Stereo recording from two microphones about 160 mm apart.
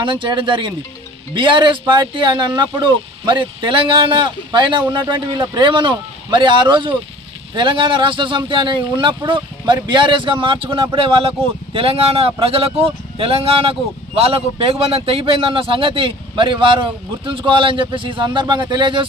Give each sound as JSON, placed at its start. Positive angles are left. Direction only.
{"t": 0.0, "sound": "a man's voice", "side_deg": -30}